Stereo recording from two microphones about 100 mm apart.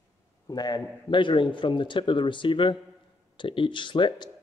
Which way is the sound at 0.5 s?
40° left (ahead or behind).